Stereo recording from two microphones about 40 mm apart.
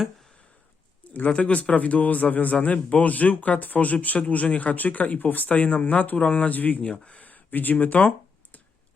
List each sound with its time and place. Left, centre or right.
1.1 s speech: left
6.8 s speech: left
7.2 s speech: left
8.5 s computer keyboard: left